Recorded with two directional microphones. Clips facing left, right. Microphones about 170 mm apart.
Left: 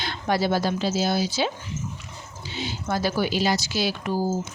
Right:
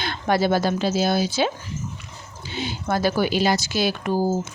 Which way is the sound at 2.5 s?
55° right (ahead or behind).